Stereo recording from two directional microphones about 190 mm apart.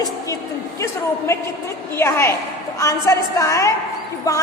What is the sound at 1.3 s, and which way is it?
A woman's voice, 15° left (ahead or behind).